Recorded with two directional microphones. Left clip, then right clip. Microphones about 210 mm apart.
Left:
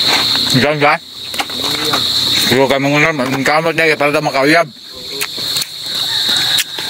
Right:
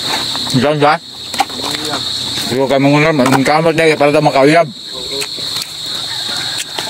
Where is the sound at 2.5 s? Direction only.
5° right (ahead or behind).